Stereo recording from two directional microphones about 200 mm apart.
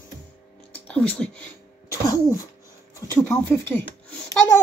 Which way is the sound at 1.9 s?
15° left (ahead or behind).